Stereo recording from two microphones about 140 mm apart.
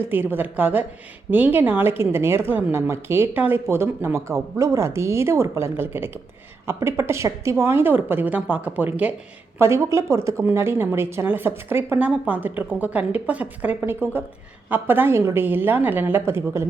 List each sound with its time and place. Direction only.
0.1 s a woman's voice: 15° right (ahead or behind)